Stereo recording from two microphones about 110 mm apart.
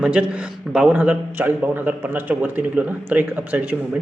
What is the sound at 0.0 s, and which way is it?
A man's voice, 10° right (ahead or behind).